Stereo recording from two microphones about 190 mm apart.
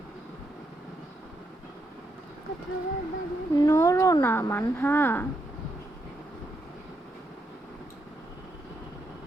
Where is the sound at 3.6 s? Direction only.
20° left (ahead or behind).